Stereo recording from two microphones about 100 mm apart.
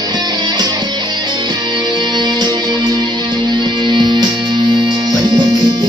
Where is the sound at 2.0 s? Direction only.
45° right (ahead or behind).